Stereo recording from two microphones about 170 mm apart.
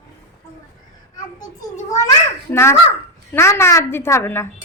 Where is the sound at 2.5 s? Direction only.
15° left (ahead or behind).